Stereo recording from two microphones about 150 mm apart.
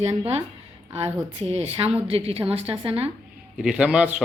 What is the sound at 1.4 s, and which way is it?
A woman's voice, 45° right (ahead or behind).